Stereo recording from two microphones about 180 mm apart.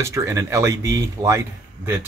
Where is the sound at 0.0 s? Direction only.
15° right (ahead or behind).